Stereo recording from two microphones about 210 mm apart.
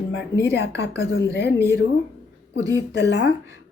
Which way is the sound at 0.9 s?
15° right (ahead or behind).